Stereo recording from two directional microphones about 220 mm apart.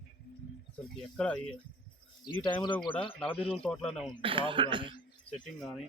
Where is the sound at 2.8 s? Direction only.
20° left (ahead or behind).